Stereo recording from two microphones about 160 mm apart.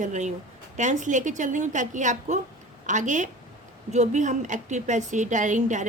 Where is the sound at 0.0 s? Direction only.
50° right (ahead or behind).